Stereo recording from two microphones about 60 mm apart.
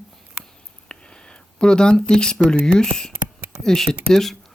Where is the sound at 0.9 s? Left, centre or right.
Centre.